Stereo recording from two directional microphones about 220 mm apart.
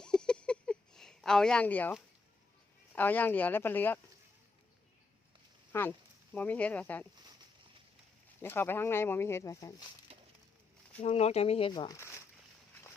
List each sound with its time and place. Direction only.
0.0 s a sound: 5° left (ahead or behind)
2.9 s speech: 10° left (ahead or behind)
5.7 s speech: 10° left (ahead or behind)
8.4 s speech: 10° left (ahead or behind)
11.0 s speech: 30° left (ahead or behind)